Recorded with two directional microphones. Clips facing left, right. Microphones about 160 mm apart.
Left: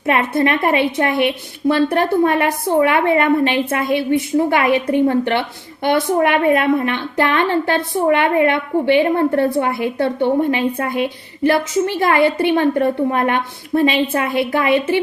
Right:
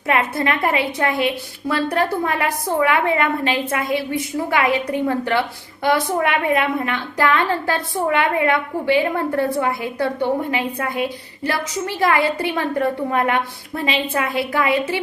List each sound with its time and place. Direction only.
0.0 s a woman's voice: 25° left (ahead or behind)